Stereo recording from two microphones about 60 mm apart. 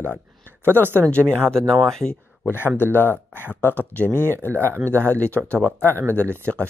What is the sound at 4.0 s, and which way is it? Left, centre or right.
Speech, right.